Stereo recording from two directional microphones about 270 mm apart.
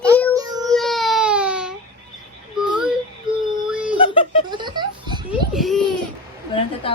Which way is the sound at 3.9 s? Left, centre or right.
Centre.